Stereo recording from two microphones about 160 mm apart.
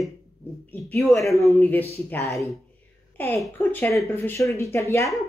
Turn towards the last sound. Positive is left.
turn(degrees=15)  # may be behind; listen again after turning